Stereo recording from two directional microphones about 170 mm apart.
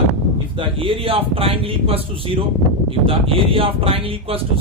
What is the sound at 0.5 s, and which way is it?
Speech, 30° right (ahead or behind).